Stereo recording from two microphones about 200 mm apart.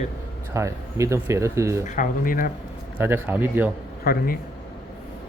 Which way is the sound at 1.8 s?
40° left (ahead or behind).